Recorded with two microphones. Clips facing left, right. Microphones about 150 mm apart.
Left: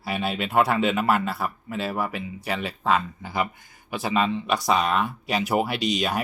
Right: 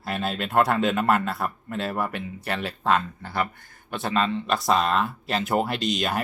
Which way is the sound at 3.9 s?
5° left (ahead or behind).